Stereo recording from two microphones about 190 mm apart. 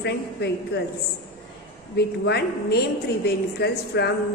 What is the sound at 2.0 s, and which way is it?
A woman's voice, 60° left (ahead or behind).